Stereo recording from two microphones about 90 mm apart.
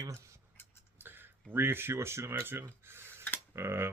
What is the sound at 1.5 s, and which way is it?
Speech, 25° right (ahead or behind).